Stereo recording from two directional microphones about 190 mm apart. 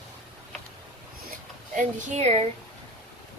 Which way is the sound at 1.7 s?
40° right (ahead or behind).